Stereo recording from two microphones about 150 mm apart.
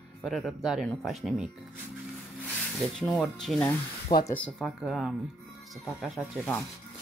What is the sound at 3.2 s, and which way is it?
Speech, centre (ahead or behind).